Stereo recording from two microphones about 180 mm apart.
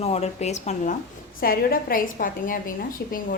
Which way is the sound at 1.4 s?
55° left (ahead or behind).